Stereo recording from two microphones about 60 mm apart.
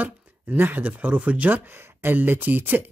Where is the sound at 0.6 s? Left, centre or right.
Right.